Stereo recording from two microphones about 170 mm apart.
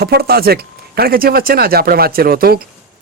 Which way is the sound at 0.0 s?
65° right (ahead or behind).